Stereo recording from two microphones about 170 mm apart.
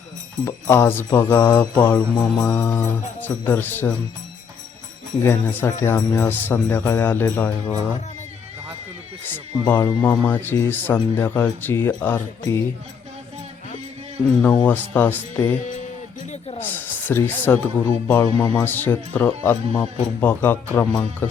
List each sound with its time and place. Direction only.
0.4 s speech: 15° left (ahead or behind)
5.2 s speech: 15° left (ahead or behind)
9.3 s speech: 10° left (ahead or behind)
14.6 s speech: 10° left (ahead or behind)
16.6 s speech: 10° left (ahead or behind)